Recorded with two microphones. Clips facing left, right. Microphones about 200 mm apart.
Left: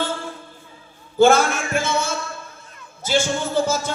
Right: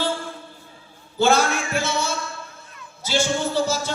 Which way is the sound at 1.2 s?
50° left (ahead or behind).